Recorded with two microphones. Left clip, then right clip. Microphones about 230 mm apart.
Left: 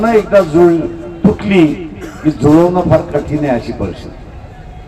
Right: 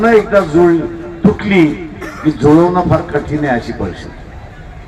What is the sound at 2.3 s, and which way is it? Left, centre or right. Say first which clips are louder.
A man's voice: even; left.